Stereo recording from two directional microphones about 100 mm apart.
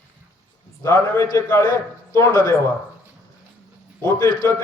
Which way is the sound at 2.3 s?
45° left (ahead or behind).